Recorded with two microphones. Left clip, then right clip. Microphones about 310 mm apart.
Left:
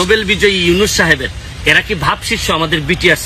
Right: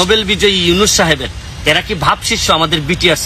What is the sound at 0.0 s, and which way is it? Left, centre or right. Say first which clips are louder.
Speech: even; right.